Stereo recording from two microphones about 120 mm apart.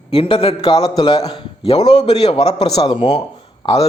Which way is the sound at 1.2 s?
50° left (ahead or behind).